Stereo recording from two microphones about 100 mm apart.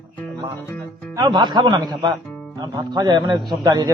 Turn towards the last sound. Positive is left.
turn(degrees=-40)  # may be behind; listen again after turning